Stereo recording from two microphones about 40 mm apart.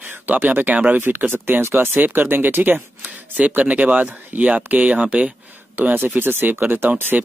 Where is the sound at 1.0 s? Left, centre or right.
Right.